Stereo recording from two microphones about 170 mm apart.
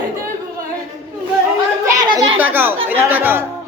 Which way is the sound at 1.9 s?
25° right (ahead or behind).